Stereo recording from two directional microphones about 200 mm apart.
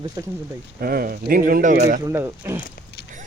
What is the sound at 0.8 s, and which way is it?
Speech, 50° right (ahead or behind).